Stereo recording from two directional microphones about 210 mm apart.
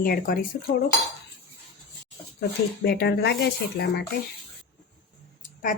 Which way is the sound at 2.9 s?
50° left (ahead or behind).